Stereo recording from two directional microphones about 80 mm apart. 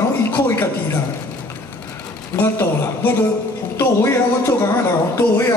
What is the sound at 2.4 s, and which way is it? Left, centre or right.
Speech, left.